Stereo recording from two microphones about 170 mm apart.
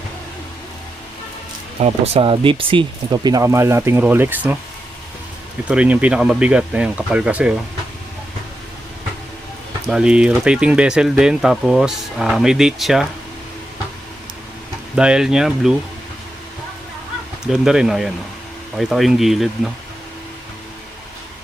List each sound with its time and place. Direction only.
1.8 s speech: 35° right (ahead or behind); by 4.5 s 10° right (ahead or behind)
5.6 s speech: 10° right (ahead or behind)
9.8 s speech: 5° right (ahead or behind)
14.9 s speech: 5° right (ahead or behind)
17.4 s speech: 5° right (ahead or behind)